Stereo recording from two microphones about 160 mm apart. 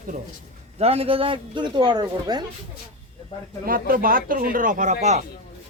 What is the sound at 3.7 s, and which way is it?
Speech, 60° right (ahead or behind).